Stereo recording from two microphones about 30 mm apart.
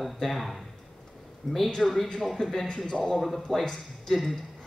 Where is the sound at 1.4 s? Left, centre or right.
Centre.